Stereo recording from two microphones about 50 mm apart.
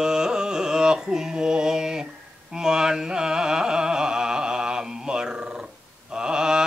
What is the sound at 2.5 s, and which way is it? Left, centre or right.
Carnatic music, centre.